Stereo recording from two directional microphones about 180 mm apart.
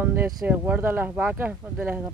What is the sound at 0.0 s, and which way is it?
Speech, 10° right (ahead or behind).